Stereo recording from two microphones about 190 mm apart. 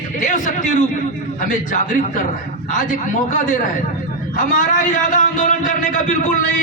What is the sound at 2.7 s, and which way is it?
A man's voice, 40° left (ahead or behind).